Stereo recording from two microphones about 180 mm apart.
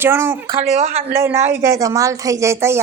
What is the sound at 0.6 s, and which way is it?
Speech, 35° right (ahead or behind).